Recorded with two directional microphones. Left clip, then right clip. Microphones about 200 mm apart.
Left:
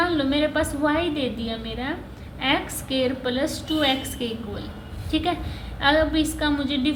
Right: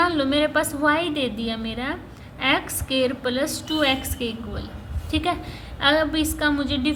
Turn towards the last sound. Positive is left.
turn(degrees=-25)  # may be behind; listen again after turning